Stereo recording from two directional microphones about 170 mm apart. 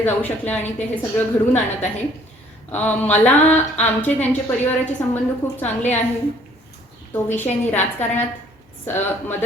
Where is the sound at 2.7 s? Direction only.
10° left (ahead or behind).